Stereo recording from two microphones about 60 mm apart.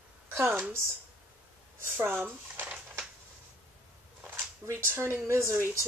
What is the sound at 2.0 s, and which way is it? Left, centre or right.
Speech, right.